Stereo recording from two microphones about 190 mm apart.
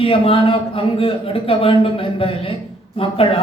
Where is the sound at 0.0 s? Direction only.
30° left (ahead or behind).